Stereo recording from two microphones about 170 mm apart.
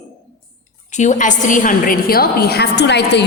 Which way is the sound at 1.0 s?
45° left (ahead or behind).